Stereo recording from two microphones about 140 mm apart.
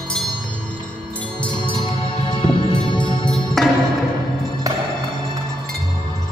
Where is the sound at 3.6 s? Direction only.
Centre (ahead or behind).